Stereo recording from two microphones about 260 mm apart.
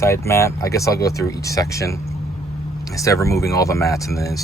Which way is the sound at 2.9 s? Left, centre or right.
Centre.